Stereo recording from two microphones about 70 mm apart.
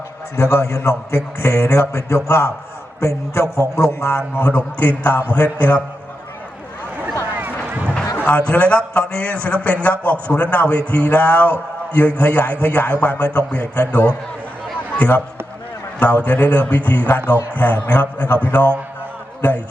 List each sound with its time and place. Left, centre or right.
0.3 s a man's voice: left
4.4 s a man's voice: left
7.3 s a sound: right
8.1 s a man's voice: left
19.4 s speech: left